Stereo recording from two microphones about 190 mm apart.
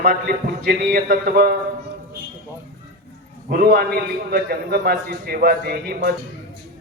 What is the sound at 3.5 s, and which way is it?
A man's voice, 50° right (ahead or behind).